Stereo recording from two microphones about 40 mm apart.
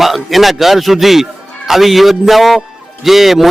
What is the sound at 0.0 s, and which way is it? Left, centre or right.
A man's voice, centre.